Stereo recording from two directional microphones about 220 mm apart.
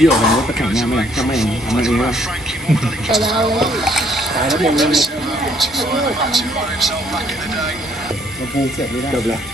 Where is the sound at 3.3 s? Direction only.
20° right (ahead or behind).